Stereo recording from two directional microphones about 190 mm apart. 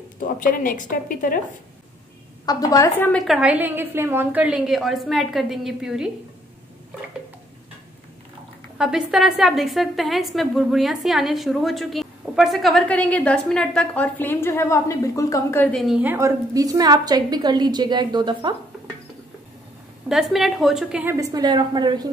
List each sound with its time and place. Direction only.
0.2 s a woman's voice: 45° left (ahead or behind)
2.4 s a woman's voice: 15° left (ahead or behind); by 6.1 s 5° right (ahead or behind)
8.7 s a woman's voice: 5° right (ahead or behind); by 18.6 s 25° right (ahead or behind)
20.1 s a woman's voice: centre (ahead or behind); by 22.1 s 20° right (ahead or behind)